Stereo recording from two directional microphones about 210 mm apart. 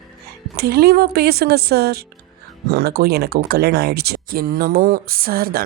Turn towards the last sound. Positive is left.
turn(degrees=-45)  # may be behind; listen again after turning